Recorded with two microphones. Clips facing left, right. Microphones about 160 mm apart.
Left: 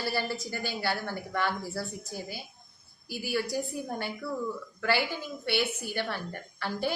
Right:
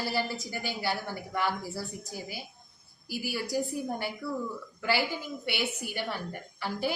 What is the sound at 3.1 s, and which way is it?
Speech, 10° right (ahead or behind).